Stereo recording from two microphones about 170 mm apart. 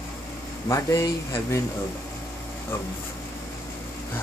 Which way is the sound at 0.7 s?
20° left (ahead or behind).